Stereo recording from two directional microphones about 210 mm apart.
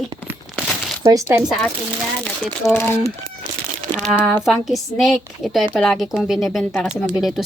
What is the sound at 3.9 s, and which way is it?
A woman's voice, 5° right (ahead or behind).